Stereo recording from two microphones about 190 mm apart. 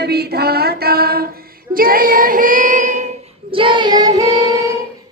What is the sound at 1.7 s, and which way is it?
Child singing, 50° right (ahead or behind).